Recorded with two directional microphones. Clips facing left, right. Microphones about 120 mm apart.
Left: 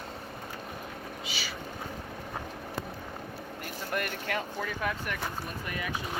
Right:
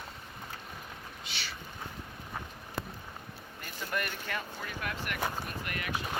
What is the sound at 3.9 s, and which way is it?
Speech, 75° left (ahead or behind).